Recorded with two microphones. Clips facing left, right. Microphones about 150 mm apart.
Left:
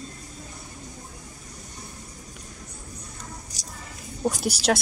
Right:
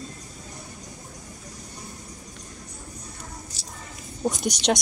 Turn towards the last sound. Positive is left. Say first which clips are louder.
# even
turn(degrees=5)  # may be behind; listen again after turning